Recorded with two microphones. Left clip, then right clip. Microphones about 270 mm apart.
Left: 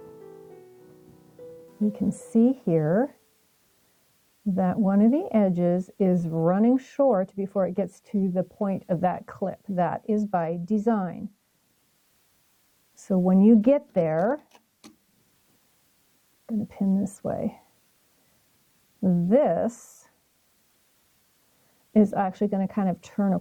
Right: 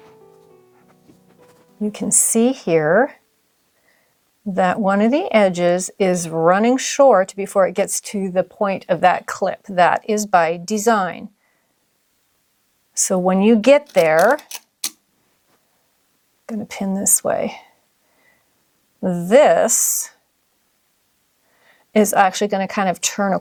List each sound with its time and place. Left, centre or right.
1.9 s a woman's voice: centre
4.5 s a woman's voice: centre
13.1 s a woman's voice: centre
16.6 s a woman's voice: centre
19.0 s a woman's voice: centre
21.9 s a woman's voice: centre